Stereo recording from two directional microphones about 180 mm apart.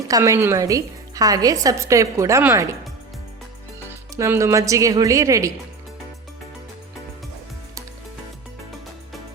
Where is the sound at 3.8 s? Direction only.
15° right (ahead or behind).